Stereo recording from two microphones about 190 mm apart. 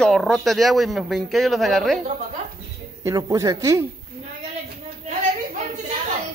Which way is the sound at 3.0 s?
15° right (ahead or behind).